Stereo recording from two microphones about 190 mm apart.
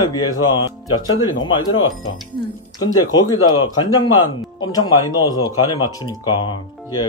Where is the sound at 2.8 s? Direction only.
20° left (ahead or behind).